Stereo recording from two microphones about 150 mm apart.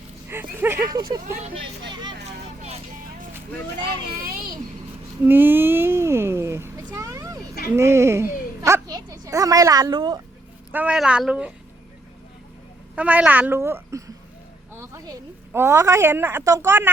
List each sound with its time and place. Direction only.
0.5 s speech: 15° right (ahead or behind)
1.9 s vehicle: 30° right (ahead or behind)
5.2 s a sound: 15° right (ahead or behind)
7.8 s a child's voice: 20° right (ahead or behind)
10.7 s speech: 10° right (ahead or behind)
13.0 s speech: 10° right (ahead or behind)
14.7 s vehicle: 20° right (ahead or behind)
15.5 s speech: 15° right (ahead or behind)